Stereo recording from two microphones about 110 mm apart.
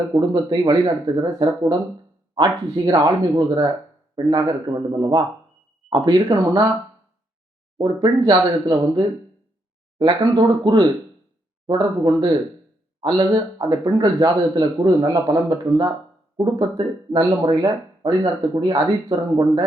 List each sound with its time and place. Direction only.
0.1 s speech: 35° right (ahead or behind)
7.8 s speech: 40° right (ahead or behind)